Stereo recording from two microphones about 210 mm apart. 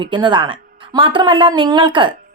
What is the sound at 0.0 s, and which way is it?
A woman's voice, 20° right (ahead or behind).